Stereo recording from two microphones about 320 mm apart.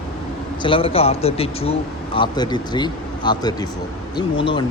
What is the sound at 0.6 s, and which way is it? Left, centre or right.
Speech, centre.